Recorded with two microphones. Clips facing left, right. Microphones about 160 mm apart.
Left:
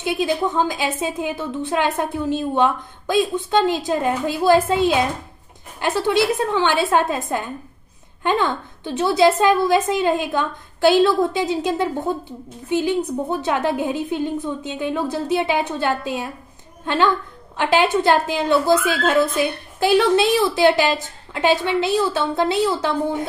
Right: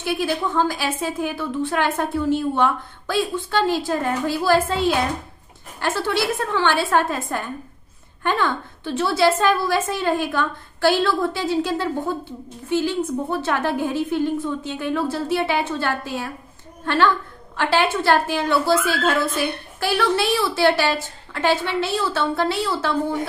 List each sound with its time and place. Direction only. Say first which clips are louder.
0.0 s a woman's voice: left 2 dB; 20° left (ahead or behind)